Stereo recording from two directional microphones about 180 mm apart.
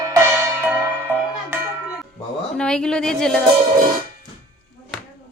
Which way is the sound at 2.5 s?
5° left (ahead or behind).